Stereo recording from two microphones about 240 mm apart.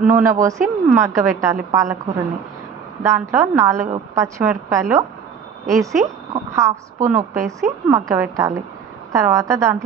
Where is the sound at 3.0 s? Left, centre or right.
Centre.